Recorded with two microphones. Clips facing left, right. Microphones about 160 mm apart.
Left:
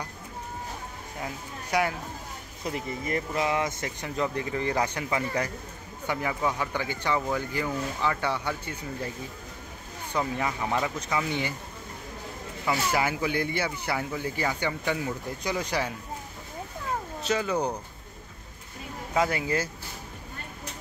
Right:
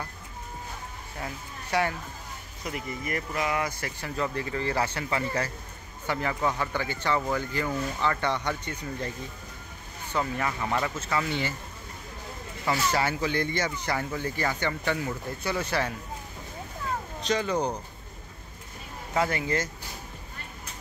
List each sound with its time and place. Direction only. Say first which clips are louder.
1.2 s speech: left 1 dB; 10° left (ahead or behind)
2.6 s speech: left 2 dB; 30° left (ahead or behind); by 9.1 s 10° left (ahead or behind)
10.1 s speech: even; 15° left (ahead or behind)
12.6 s speech: even; 10° left (ahead or behind)
17.2 s speech: right 1 dB; 5° left (ahead or behind)
19.1 s speech: left 1 dB; 10° left (ahead or behind)